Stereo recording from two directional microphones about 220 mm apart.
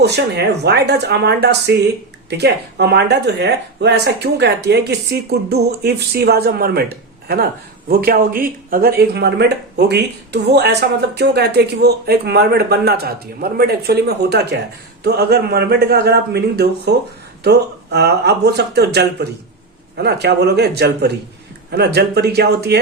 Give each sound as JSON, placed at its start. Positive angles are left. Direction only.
{"t": 0.0, "sound": "speech", "side_deg": -50}